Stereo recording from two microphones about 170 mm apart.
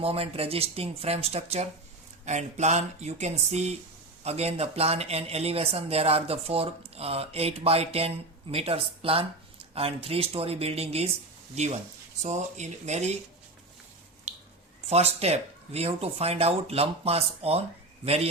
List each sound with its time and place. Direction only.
0.0 s speech: 35° right (ahead or behind)
14.3 s drip: 40° right (ahead or behind)
14.8 s speech: 40° right (ahead or behind)